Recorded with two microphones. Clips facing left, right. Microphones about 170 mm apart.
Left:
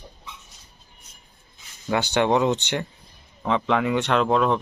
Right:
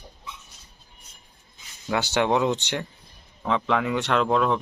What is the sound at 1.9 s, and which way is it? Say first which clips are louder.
Speech: left 2 dB; centre (ahead or behind).